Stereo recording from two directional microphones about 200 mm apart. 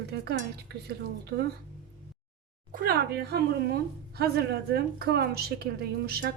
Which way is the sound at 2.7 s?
50° right (ahead or behind).